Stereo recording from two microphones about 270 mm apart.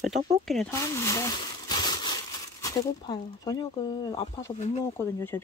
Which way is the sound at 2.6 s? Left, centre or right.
Centre.